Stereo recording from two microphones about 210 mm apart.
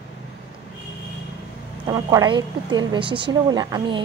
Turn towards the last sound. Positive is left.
turn(degrees=-20)  # may be behind; listen again after turning